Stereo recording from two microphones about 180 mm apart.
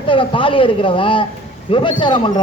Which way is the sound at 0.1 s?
30° left (ahead or behind).